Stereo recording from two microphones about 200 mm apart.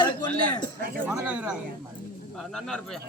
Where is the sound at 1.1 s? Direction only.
5° right (ahead or behind).